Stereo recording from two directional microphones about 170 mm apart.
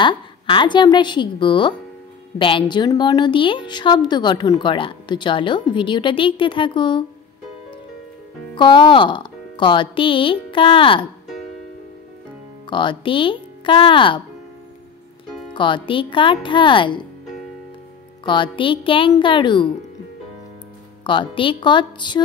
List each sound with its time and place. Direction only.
0.0 s a woman's voice: 30° left (ahead or behind)
8.5 s a woman's voice: 30° left (ahead or behind)
12.6 s speech: 30° left (ahead or behind)
15.5 s a woman's voice: 30° left (ahead or behind)
18.2 s a woman's voice: 30° left (ahead or behind)
21.0 s a woman's voice: 30° left (ahead or behind)